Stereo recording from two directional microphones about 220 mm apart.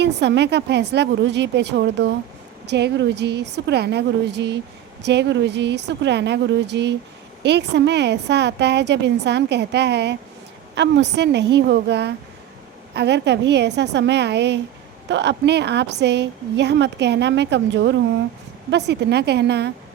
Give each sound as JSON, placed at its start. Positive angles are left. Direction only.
{"t": 0.0, "sound": "a woman's voice", "side_deg": -50}